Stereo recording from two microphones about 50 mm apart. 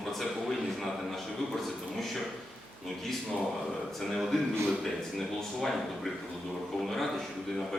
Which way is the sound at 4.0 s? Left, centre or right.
Centre.